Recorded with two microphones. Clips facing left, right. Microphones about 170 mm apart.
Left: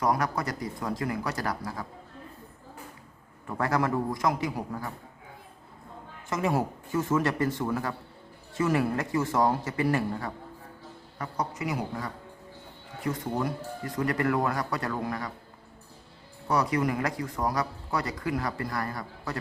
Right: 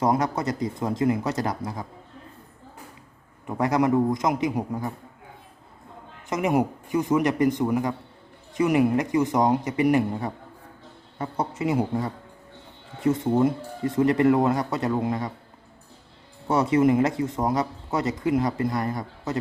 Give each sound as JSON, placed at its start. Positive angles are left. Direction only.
{"t": 0.0, "sound": "speech", "side_deg": -25}
{"t": 3.4, "sound": "speech", "side_deg": -20}
{"t": 6.2, "sound": "speech", "side_deg": -20}
{"t": 16.5, "sound": "speech", "side_deg": -25}